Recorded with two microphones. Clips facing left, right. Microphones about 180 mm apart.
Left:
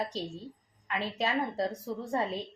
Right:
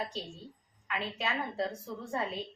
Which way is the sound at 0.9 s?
35° left (ahead or behind).